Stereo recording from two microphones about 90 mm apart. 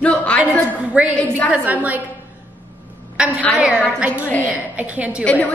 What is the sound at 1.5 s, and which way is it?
Speech, 15° right (ahead or behind).